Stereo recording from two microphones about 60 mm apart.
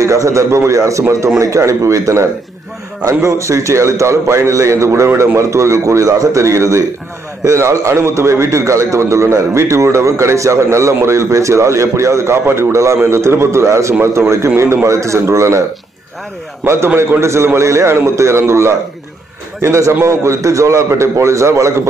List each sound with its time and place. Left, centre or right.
0.0 s a man's voice: right
16.6 s a man's voice: right